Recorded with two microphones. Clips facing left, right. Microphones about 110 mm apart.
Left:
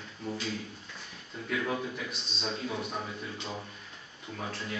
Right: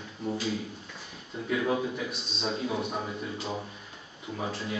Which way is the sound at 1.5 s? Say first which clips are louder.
Right 4 dB; 10° right (ahead or behind).